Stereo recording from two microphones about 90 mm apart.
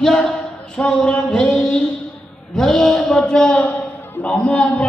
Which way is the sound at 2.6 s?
5° left (ahead or behind).